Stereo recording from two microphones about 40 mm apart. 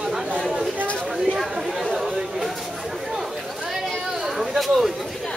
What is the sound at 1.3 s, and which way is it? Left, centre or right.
Chatter, centre.